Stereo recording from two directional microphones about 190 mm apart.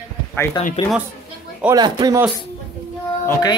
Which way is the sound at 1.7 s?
20° right (ahead or behind).